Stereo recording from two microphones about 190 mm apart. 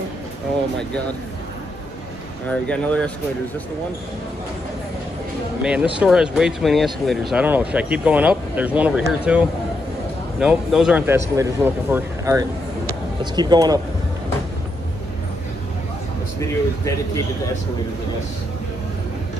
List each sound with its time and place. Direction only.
2.4 s speech: 5° left (ahead or behind)
5.6 s speech: 5° right (ahead or behind)
10.4 s speech: 5° right (ahead or behind); by 13.7 s 20° right (ahead or behind)
16.3 s speech: 15° left (ahead or behind)